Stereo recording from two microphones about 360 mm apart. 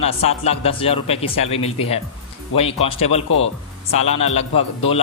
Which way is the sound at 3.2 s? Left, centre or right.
Left.